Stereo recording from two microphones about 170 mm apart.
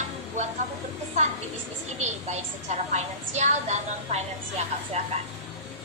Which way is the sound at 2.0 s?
40° right (ahead or behind).